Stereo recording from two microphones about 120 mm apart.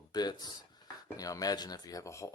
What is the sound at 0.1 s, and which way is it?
Speech, 35° left (ahead or behind).